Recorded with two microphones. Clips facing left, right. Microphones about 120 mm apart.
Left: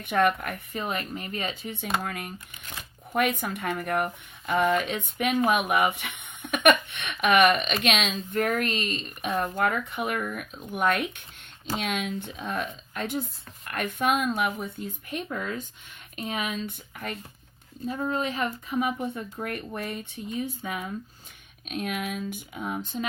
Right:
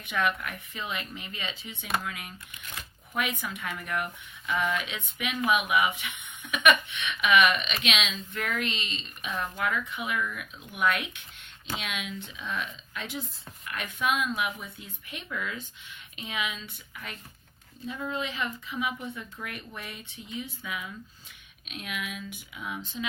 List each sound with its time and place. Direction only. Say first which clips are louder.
0.0 s speech: left 6 dB; 50° left (ahead or behind)
17.8 s speech: left 5 dB; 40° left (ahead or behind)